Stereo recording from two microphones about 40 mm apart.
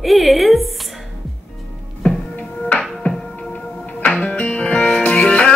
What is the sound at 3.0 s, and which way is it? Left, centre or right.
Music, left.